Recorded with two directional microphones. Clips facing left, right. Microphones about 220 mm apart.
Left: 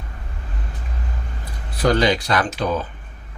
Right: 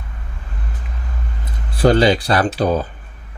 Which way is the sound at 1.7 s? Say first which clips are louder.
Right 4 dB; 30° right (ahead or behind).